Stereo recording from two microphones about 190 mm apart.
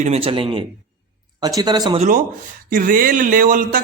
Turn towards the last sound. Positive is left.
turn(degrees=-50)  # may be behind; listen again after turning